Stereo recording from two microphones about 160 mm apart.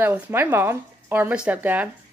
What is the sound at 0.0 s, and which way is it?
Speech, 15° right (ahead or behind).